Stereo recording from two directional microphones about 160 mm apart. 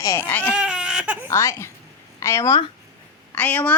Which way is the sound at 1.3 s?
15° left (ahead or behind).